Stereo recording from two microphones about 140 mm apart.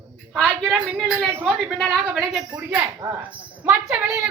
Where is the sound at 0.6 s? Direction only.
Centre (ahead or behind).